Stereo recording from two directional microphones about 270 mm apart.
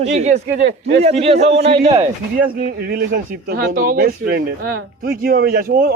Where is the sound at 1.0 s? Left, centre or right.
Right.